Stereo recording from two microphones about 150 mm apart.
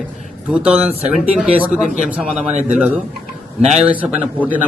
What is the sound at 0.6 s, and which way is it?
A man's voice, 10° right (ahead or behind).